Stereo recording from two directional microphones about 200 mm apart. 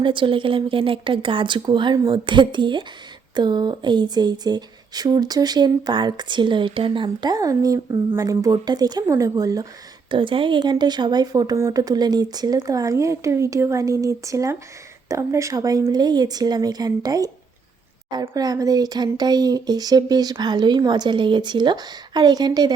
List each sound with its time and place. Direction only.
0.0 s speech: 25° right (ahead or behind)